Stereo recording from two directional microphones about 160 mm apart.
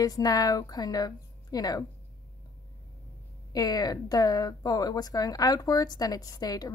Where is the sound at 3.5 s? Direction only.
25° left (ahead or behind).